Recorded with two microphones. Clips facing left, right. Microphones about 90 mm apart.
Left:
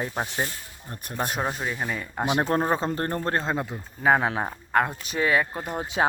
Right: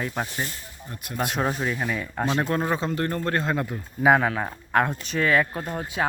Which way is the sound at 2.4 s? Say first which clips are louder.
Left 1 dB; 35° left (ahead or behind).